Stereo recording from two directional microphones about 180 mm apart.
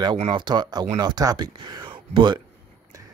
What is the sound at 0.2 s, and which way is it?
Speech, 25° right (ahead or behind).